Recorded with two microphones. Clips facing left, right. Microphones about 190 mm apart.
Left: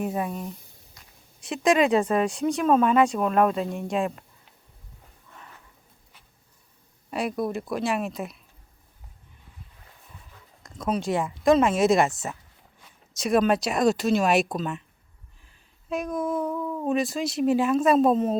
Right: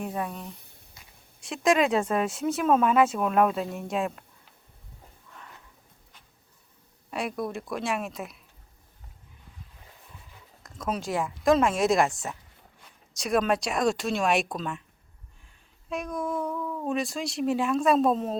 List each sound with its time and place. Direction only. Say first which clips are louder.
0.0 s speech: left 4 dB; 10° left (ahead or behind)
7.1 s speech: left 4 dB; centre (ahead or behind)
10.6 s speech: left 4 dB; centre (ahead or behind)
15.9 s a sound: left 4 dB; centre (ahead or behind)
16.4 s a sound: left 3 dB; 20° left (ahead or behind)
16.9 s speech: left 5 dB; centre (ahead or behind)